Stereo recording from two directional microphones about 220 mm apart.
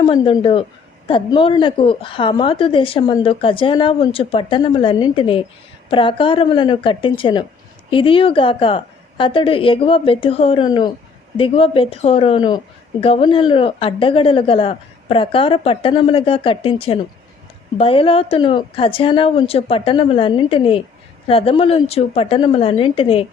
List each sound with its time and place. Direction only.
0.0 s a woman's voice: 20° left (ahead or behind)